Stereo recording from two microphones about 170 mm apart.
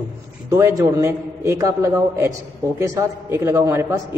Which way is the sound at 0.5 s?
20° right (ahead or behind).